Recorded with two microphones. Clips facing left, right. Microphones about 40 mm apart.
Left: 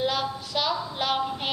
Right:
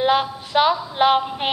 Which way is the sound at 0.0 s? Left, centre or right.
Right.